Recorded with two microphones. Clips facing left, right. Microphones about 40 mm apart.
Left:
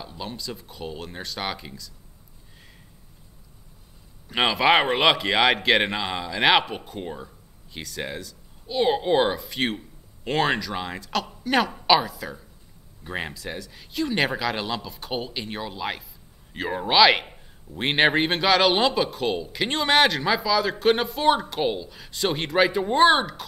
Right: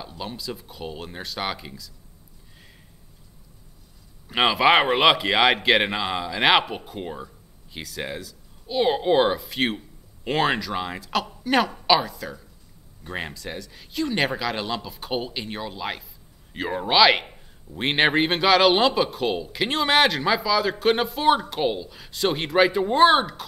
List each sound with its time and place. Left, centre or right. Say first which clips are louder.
0.2 s a man's voice: right 1 dB; centre
4.3 s a man's voice: right 1 dB; centre